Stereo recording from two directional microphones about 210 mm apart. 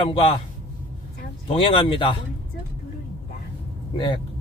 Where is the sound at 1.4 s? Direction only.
25° left (ahead or behind).